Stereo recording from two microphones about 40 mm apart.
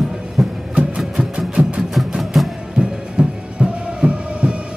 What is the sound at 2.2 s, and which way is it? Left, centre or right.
Music, centre.